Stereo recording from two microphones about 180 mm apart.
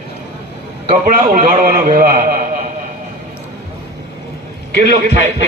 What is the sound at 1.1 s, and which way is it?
A man's voice, 50° right (ahead or behind).